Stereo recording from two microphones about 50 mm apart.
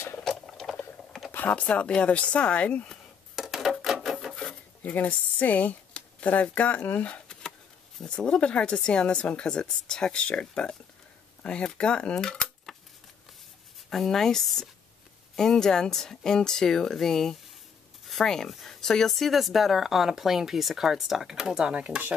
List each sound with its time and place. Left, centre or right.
1.3 s speech: left
1.7 s a woman's voice: left
3.3 s a sound: centre
3.8 s wood: centre
4.8 s a woman's voice: left; by 12.7 s centre
13.8 s a woman's voice: centre; by 22.0 s right